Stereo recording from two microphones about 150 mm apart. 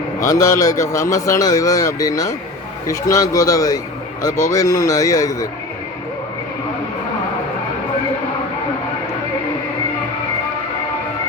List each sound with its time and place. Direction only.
0.2 s a man's voice: 20° left (ahead or behind)